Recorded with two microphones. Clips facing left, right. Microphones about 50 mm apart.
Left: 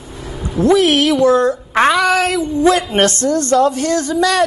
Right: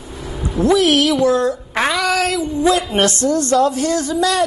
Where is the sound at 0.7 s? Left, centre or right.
Centre.